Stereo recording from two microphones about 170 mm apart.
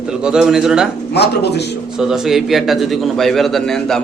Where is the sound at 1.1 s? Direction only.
75° left (ahead or behind).